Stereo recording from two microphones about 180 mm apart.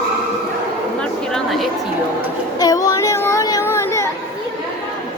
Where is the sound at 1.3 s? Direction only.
Centre (ahead or behind).